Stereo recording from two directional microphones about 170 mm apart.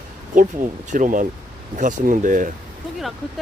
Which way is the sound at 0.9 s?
50° right (ahead or behind).